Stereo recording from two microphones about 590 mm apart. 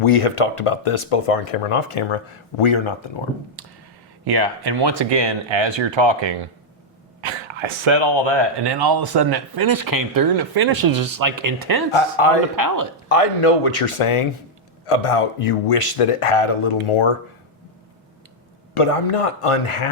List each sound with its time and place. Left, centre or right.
0.0 s speech: left
4.3 s speech: right
11.9 s speech: left
12.5 s speech: right
13.1 s speech: left
18.7 s speech: left